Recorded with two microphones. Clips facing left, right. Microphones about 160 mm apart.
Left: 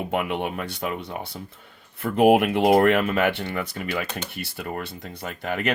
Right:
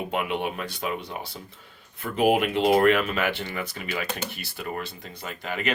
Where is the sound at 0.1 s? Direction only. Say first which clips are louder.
Left 2 dB; 50° left (ahead or behind).